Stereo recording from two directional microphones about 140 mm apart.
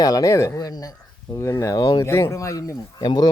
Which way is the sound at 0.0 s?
25° left (ahead or behind).